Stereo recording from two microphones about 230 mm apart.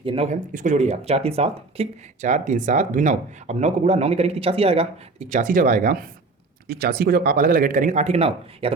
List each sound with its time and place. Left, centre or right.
0.0 s speech: right